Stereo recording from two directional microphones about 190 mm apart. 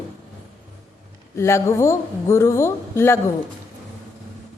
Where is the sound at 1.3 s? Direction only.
15° left (ahead or behind).